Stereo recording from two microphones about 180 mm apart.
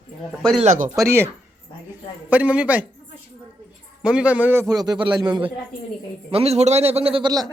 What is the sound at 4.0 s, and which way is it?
A man's voice, 5° right (ahead or behind).